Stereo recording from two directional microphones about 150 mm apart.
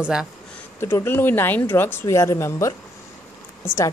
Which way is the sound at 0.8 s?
15° left (ahead or behind).